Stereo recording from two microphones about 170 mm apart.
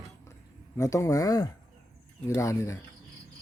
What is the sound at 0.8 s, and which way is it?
Speech, 15° left (ahead or behind).